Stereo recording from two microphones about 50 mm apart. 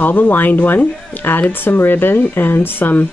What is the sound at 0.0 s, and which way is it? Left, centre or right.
Speech, left.